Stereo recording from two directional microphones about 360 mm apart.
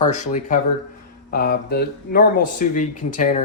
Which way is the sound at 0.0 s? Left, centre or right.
Centre.